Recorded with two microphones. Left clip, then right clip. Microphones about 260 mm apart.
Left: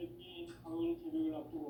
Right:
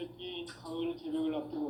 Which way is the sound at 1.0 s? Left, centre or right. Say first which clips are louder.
Right 4 dB; right.